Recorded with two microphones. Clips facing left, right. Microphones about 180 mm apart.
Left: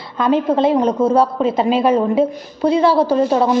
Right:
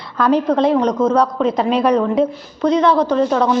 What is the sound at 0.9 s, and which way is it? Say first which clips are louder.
Speech: left 1 dB; 30° left (ahead or behind).